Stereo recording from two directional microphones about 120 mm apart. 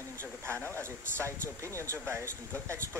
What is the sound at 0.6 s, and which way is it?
Speech, 15° left (ahead or behind).